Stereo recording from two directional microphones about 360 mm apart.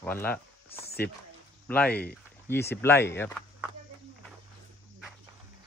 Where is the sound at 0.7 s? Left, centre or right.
Centre.